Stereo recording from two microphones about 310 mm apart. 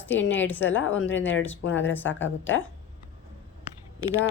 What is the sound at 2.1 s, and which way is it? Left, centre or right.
Speech, left.